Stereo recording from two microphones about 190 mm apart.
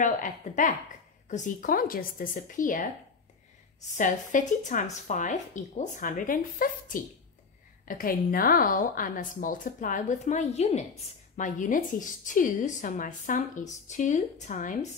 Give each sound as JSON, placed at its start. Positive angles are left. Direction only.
{"t": 0.0, "sound": "a woman's voice", "side_deg": 45}
{"t": 3.9, "sound": "a woman's voice", "side_deg": 45}